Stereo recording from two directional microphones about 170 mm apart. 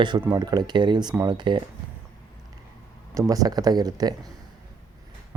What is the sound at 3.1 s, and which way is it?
Speech, 20° right (ahead or behind).